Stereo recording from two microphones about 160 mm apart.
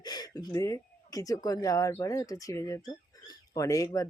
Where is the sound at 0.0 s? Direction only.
25° left (ahead or behind).